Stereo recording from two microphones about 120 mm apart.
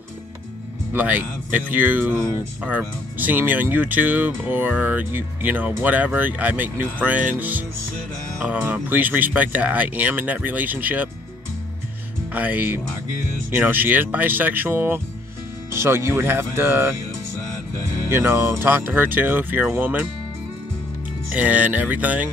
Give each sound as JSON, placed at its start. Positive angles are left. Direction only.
{"t": 0.9, "sound": "speech", "side_deg": -15}
{"t": 12.3, "sound": "speech", "side_deg": -15}
{"t": 18.1, "sound": "speech", "side_deg": -20}
{"t": 21.3, "sound": "speech", "side_deg": -10}